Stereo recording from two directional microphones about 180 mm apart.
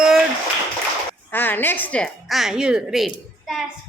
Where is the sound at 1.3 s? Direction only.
10° left (ahead or behind).